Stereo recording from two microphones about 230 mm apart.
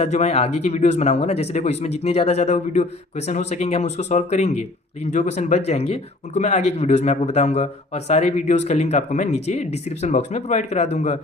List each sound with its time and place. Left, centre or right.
0.0 s speech: left